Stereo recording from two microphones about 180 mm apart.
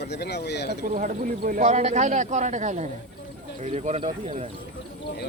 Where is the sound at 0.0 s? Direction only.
65° left (ahead or behind).